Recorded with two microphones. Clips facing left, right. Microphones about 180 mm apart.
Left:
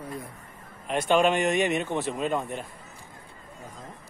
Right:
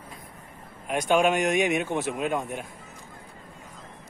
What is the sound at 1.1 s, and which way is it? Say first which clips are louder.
Speech: even; 5° right (ahead or behind).